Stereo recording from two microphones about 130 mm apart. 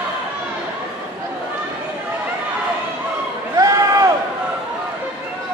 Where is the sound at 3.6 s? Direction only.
25° right (ahead or behind).